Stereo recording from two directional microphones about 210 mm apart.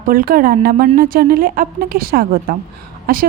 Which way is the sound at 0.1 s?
45° right (ahead or behind).